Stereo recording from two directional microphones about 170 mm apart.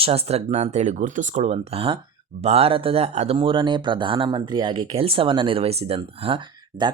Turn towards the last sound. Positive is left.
turn(degrees=-30)  # may be behind; listen again after turning